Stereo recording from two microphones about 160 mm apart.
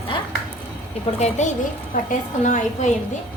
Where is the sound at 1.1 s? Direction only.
45° left (ahead or behind).